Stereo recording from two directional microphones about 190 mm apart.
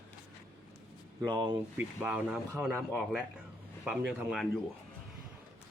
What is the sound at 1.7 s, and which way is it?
Speech, 5° right (ahead or behind).